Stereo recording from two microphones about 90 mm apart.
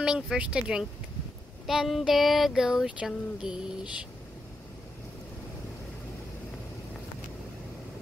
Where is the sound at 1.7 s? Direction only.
5° right (ahead or behind).